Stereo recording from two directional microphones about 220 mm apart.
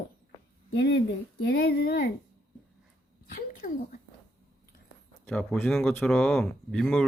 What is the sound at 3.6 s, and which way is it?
Speech, 40° left (ahead or behind).